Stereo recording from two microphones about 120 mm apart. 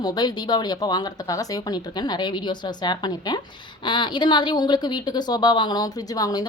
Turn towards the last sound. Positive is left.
turn(degrees=30)  # may be behind; listen again after turning